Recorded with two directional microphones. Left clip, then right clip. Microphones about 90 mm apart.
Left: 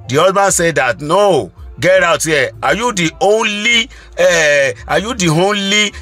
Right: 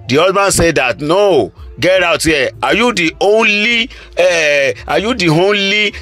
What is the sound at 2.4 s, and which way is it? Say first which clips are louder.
Speech: right 1 dB; 55° right (ahead or behind).